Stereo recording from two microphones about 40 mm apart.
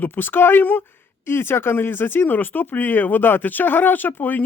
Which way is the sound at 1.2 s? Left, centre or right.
Left.